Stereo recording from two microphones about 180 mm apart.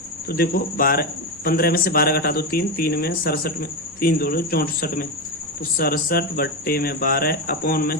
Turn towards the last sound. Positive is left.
turn(degrees=55)  # may be behind; listen again after turning